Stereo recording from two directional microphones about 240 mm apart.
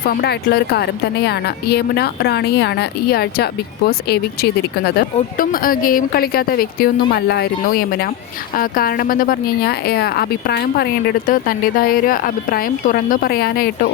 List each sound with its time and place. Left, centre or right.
0.2 s speech: left